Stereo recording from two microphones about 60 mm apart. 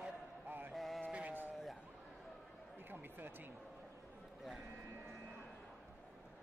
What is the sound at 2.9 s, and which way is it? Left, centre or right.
Speech, right.